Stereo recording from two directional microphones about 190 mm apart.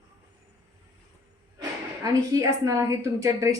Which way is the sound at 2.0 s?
20° right (ahead or behind).